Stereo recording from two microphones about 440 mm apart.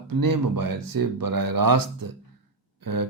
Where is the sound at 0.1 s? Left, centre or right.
Right.